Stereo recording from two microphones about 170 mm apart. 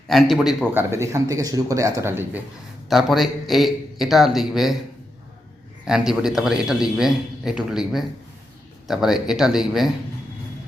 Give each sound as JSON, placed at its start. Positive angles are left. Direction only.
{"t": 0.1, "sound": "a man's voice", "side_deg": 0}
{"t": 2.9, "sound": "a man's voice", "side_deg": 0}
{"t": 5.8, "sound": "a man's voice", "side_deg": -5}